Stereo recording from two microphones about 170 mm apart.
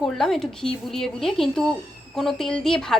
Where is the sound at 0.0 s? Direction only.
Centre (ahead or behind).